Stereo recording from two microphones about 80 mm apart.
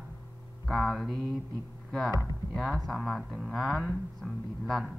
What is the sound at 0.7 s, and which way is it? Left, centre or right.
Speech, centre.